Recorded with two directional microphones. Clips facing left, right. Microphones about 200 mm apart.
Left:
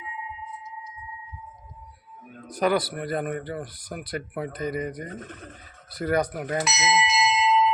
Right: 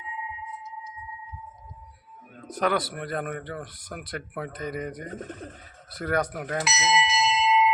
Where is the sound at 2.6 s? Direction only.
Centre (ahead or behind).